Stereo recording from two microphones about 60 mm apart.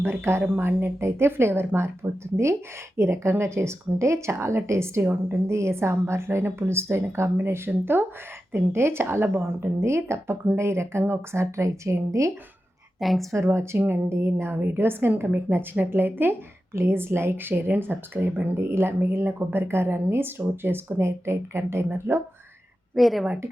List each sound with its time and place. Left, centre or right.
0.0 s a woman's voice: right
13.0 s a woman's voice: centre
13.3 s a woman's voice: right
17.5 s a woman's voice: right
23.0 s a woman's voice: centre